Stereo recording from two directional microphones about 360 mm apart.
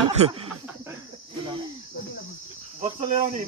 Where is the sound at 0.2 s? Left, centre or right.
Centre.